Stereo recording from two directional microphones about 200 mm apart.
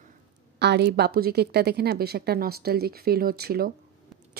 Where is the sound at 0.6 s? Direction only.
55° right (ahead or behind).